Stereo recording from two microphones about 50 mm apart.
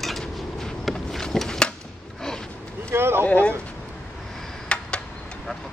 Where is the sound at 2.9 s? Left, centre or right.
Right.